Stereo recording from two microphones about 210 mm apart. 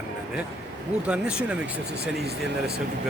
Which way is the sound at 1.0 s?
5° right (ahead or behind).